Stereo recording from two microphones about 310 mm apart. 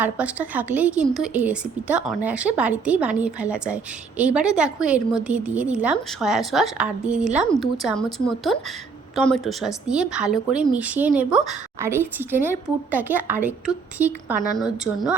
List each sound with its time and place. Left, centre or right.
0.0 s a woman's voice: centre